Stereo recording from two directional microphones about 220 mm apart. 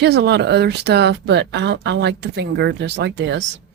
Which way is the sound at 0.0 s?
50° right (ahead or behind).